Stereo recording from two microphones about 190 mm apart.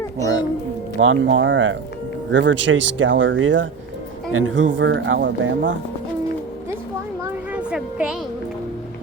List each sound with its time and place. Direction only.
0.9 s speech: 85° right
7.5 s music: 5° right (ahead or behind)